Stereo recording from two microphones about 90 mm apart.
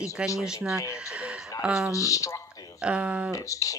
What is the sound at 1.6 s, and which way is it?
Speech, 10° right (ahead or behind).